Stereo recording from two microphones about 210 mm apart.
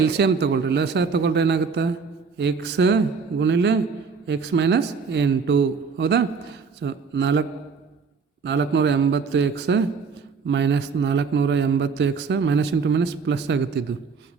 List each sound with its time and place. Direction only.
0.0 s a man's voice: 55° right (ahead or behind)
8.4 s a man's voice: 55° right (ahead or behind)